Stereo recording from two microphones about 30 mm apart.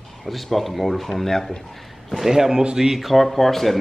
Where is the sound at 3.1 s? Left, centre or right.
Centre.